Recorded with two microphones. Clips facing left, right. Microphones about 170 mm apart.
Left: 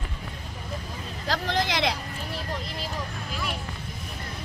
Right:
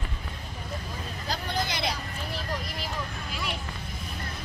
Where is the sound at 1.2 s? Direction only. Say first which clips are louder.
Left 5 dB; 90° left.